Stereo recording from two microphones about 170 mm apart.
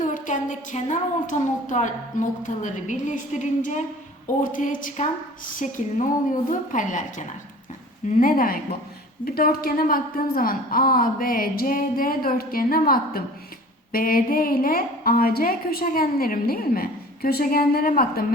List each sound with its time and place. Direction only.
0.0 s a woman's voice: 50° left (ahead or behind)